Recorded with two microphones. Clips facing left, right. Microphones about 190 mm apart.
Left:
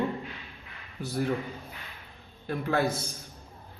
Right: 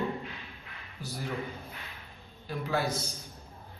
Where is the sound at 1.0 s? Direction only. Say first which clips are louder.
Left 5 dB; 55° left (ahead or behind).